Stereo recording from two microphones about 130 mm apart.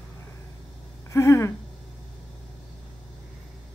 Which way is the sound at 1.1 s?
20° left (ahead or behind).